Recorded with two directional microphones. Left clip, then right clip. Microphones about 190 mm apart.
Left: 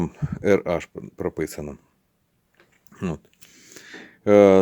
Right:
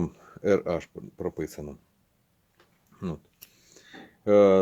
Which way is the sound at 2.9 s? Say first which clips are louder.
Left 8 dB; 45° left (ahead or behind).